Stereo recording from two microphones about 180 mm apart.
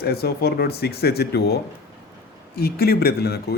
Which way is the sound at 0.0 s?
60° left (ahead or behind).